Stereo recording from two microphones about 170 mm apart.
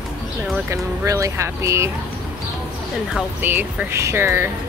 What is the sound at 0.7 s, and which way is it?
Speech, 15° right (ahead or behind).